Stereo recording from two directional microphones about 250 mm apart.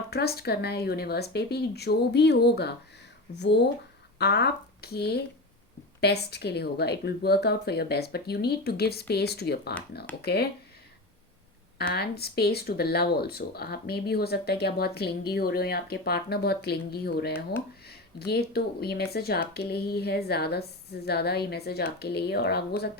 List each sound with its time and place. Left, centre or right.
0.1 s speech: left
11.9 s speech: left